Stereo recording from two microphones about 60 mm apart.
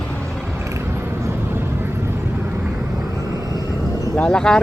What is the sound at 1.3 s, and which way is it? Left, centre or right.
Vehicle, right.